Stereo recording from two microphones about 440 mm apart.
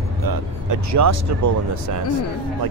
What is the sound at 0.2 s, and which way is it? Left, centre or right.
Speech, right.